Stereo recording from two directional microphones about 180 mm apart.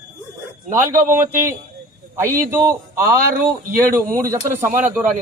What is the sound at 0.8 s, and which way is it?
A man's voice, 15° right (ahead or behind).